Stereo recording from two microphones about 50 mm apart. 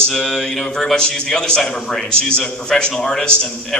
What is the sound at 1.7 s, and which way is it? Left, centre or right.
Speech, centre.